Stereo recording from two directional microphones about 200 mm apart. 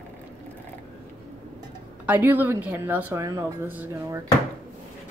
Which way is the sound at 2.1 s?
10° right (ahead or behind).